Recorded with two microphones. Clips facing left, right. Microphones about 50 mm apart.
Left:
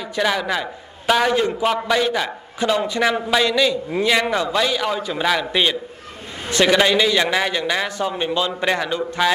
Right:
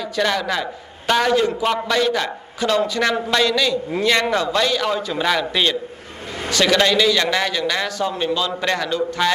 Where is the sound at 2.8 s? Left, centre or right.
Left.